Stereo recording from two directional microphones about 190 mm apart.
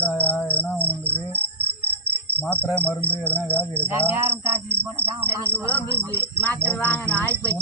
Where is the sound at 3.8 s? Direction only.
10° right (ahead or behind).